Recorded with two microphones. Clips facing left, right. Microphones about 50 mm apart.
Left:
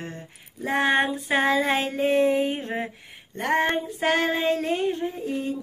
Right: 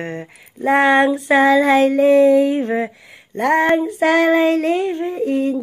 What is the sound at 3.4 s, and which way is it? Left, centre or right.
Speech, right.